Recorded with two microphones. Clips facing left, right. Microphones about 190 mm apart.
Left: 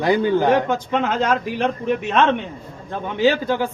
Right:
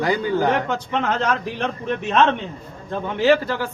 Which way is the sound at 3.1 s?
15° left (ahead or behind).